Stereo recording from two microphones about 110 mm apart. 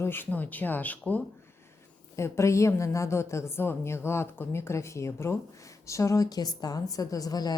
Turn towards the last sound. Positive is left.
turn(degrees=35)  # may be behind; listen again after turning